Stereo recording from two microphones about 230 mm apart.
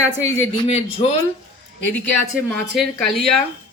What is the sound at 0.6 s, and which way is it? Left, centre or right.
Speech, left.